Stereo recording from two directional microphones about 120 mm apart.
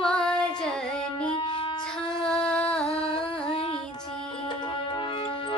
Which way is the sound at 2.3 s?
5° left (ahead or behind).